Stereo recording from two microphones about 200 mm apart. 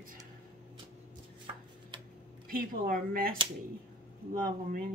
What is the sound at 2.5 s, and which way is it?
Speech, 45° right (ahead or behind).